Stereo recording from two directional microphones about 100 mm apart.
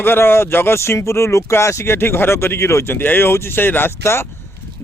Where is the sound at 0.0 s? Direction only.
25° left (ahead or behind).